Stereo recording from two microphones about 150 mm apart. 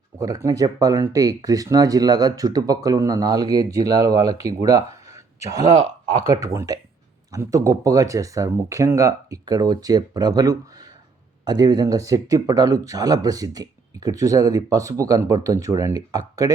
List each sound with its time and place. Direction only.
0.2 s speech: 20° right (ahead or behind)
5.6 s speech: 50° right (ahead or behind)
6.2 s speech: 20° right (ahead or behind)